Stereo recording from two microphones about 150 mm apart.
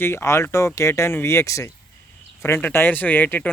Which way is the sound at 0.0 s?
15° left (ahead or behind).